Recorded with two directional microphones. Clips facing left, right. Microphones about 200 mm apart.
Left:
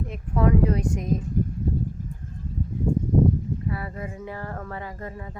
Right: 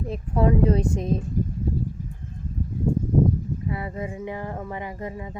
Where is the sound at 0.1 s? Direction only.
30° right (ahead or behind).